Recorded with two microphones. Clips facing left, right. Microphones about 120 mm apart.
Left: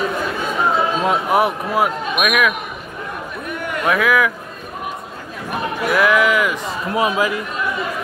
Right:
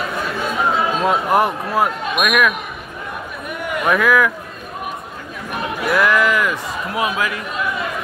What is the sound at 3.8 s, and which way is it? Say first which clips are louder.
Speech: right 1 dB; centre (ahead or behind).